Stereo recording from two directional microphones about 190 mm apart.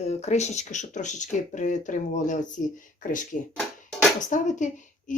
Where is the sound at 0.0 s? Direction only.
35° left (ahead or behind).